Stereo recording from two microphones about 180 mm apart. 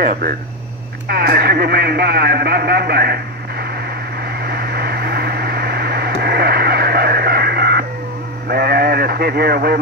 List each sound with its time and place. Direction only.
1.0 s speech: 60° right (ahead or behind)
4.5 s a sound: 60° right (ahead or behind)
8.5 s speech: 60° right (ahead or behind)